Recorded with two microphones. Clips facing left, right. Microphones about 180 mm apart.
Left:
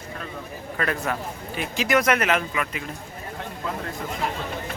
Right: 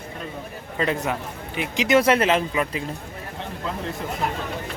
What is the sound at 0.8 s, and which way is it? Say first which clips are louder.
Speech: right 2 dB; 20° right (ahead or behind).